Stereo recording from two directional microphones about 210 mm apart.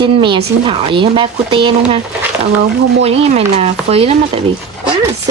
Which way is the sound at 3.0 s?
30° right (ahead or behind).